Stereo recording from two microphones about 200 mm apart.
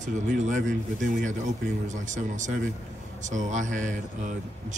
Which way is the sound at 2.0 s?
40° right (ahead or behind).